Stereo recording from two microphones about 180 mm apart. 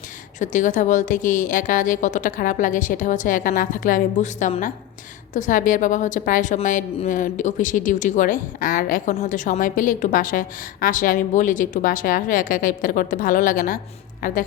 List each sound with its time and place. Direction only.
0.3 s a woman's voice: 45° left (ahead or behind)